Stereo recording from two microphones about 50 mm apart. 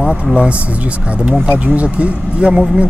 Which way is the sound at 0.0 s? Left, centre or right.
Right.